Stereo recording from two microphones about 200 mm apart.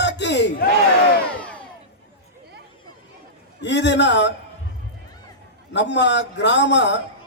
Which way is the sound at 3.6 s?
60° left (ahead or behind).